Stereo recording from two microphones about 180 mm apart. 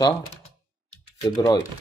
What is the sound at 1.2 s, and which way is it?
Speech, 20° left (ahead or behind).